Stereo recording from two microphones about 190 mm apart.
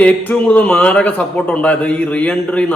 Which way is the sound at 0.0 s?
5° left (ahead or behind).